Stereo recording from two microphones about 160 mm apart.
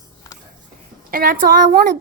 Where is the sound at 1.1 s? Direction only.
65° right (ahead or behind).